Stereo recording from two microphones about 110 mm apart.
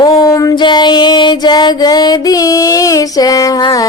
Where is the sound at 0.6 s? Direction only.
45° left (ahead or behind).